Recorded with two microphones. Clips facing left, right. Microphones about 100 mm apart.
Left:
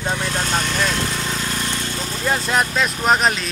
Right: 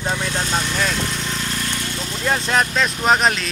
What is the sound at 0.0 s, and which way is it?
Vehicle, 5° right (ahead or behind).